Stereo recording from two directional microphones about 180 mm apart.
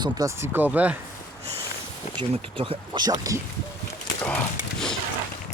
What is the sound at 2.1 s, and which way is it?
Speech, 30° right (ahead or behind).